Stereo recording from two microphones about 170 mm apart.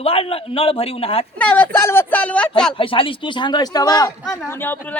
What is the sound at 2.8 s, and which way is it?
Speech, 30° left (ahead or behind).